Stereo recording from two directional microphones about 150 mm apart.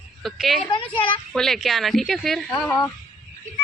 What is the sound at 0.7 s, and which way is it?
Speech, 35° left (ahead or behind).